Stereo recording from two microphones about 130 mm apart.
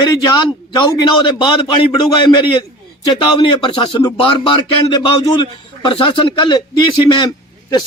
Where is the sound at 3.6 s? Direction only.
35° left (ahead or behind).